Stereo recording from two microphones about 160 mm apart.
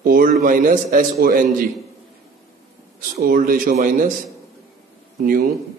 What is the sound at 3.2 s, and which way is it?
Speech, 60° right (ahead or behind).